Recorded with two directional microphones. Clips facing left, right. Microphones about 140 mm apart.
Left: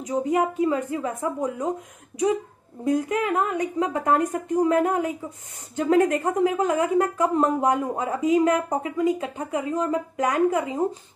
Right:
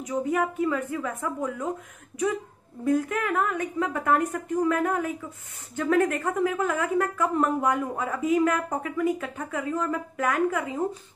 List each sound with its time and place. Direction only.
0.0 s speech: 20° left (ahead or behind)
2.8 s speech: 20° left (ahead or behind)